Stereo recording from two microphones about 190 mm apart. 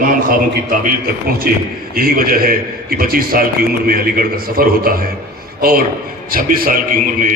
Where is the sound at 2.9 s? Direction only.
50° right (ahead or behind).